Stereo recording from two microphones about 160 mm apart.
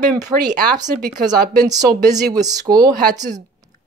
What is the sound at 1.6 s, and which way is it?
Speech, 25° right (ahead or behind).